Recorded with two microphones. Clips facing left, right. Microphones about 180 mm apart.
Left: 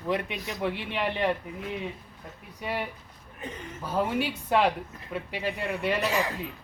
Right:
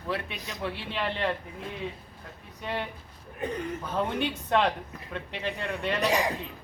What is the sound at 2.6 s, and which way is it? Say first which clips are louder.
Speech: left 1 dB; 10° left (ahead or behind).